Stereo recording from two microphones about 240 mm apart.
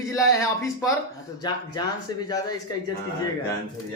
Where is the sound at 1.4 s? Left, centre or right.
Centre.